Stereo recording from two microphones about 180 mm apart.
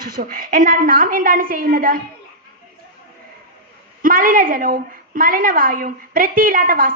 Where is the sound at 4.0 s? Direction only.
50° right (ahead or behind).